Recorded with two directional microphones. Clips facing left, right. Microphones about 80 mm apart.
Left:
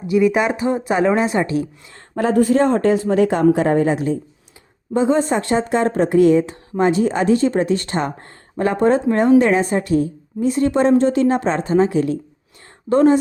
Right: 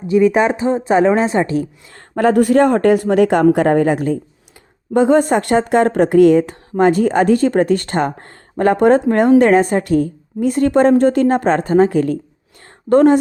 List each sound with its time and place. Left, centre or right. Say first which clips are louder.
0.1 s a woman's voice: right 3 dB; right
2.1 s speech: right 3 dB; right
12.9 s speech: right 3 dB; right